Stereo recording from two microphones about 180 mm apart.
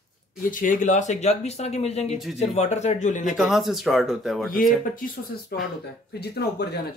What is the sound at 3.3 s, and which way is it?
Speech, centre (ahead or behind).